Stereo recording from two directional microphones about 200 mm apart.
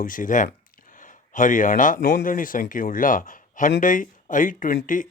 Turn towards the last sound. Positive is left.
turn(degrees=40)  # may be behind; listen again after turning